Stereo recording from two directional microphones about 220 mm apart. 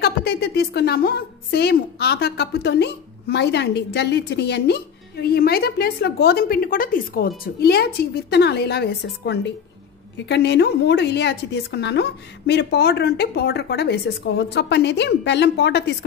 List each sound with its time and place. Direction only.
0.0 s a woman's voice: 45° left (ahead or behind)